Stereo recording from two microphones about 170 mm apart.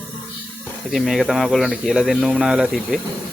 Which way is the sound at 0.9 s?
Centre (ahead or behind).